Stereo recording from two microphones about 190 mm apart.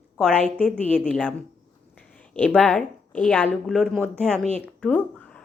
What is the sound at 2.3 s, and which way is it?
A woman's voice, 5° left (ahead or behind).